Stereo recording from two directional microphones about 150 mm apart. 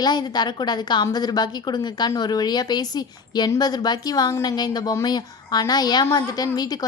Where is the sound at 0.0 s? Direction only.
25° left (ahead or behind).